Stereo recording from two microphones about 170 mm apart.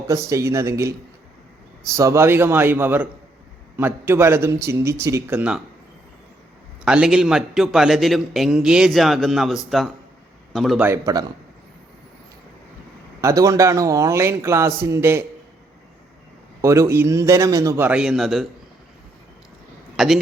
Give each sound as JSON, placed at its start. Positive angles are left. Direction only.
{"t": 0.1, "sound": "a man's voice", "side_deg": -20}
{"t": 6.8, "sound": "a man's voice", "side_deg": -5}
{"t": 10.8, "sound": "a man's voice", "side_deg": -15}
{"t": 13.2, "sound": "a man's voice", "side_deg": -20}
{"t": 16.6, "sound": "a man's voice", "side_deg": -20}
{"t": 20.0, "sound": "a man's voice", "side_deg": 0}